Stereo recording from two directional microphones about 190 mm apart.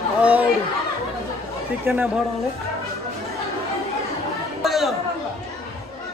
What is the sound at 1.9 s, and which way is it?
Speech, 15° right (ahead or behind).